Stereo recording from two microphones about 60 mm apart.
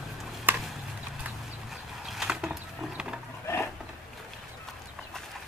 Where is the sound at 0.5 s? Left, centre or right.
Right.